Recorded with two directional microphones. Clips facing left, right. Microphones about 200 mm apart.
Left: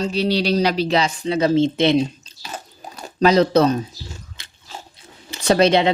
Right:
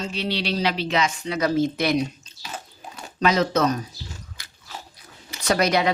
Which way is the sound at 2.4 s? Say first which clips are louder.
Left 3 dB; 40° left (ahead or behind).